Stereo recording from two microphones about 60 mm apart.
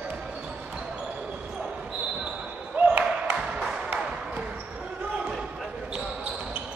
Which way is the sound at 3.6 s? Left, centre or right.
Centre.